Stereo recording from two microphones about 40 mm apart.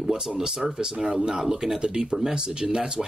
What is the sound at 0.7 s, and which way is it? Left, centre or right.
Speech, right.